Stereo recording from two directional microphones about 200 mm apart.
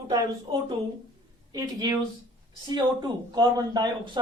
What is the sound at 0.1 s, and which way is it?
Speech, 20° right (ahead or behind).